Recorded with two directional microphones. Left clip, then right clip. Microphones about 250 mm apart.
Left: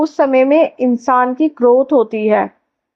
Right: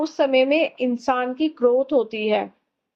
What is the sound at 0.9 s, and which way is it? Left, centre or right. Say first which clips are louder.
A woman's voice: left 9 dB; centre.